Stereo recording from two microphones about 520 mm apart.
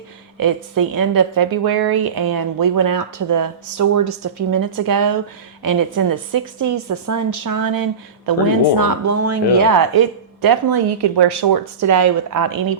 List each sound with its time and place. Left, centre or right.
0.3 s a woman's voice: right
11.8 s a woman's voice: right